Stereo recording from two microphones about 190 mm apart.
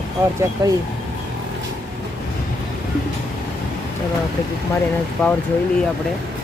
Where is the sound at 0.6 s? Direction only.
20° right (ahead or behind).